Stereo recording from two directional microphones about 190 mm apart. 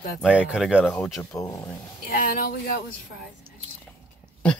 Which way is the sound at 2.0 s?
50° left (ahead or behind).